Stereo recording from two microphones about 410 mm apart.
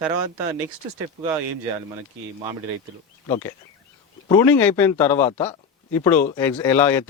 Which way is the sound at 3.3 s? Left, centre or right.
Centre.